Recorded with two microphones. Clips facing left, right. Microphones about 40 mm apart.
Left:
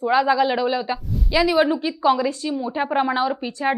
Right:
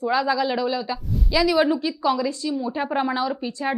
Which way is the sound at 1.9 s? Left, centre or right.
Left.